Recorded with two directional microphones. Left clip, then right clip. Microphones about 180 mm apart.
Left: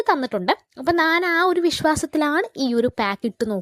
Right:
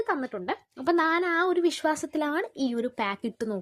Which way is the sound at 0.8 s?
20° left (ahead or behind).